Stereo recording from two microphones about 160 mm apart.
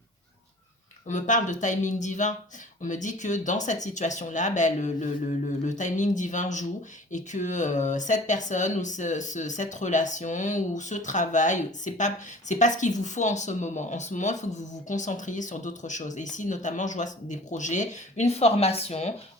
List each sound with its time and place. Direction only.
1.0 s speech: 50° left (ahead or behind)